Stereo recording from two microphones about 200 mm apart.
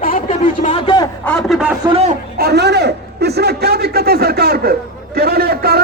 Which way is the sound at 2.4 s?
55° right (ahead or behind).